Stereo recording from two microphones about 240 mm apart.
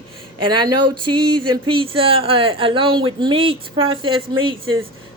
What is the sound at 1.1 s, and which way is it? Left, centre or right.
A woman's voice, centre.